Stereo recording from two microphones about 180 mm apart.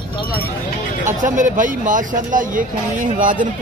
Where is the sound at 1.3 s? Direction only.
45° right (ahead or behind).